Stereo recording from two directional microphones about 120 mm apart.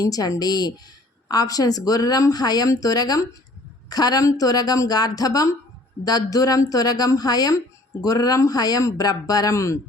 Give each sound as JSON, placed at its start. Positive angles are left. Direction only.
{"t": 0.0, "sound": "speech", "side_deg": 30}